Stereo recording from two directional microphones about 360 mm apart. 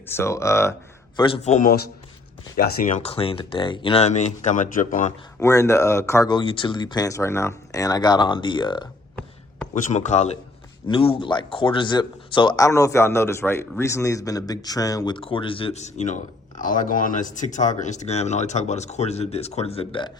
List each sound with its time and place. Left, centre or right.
0.0 s speech: centre
5.4 s speech: centre
9.7 s speech: centre